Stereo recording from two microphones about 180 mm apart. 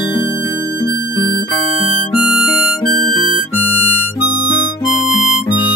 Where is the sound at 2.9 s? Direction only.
55° left (ahead or behind).